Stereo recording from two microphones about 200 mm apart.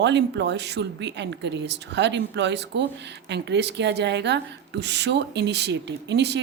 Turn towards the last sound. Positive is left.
turn(degrees=-60)  # may be behind; listen again after turning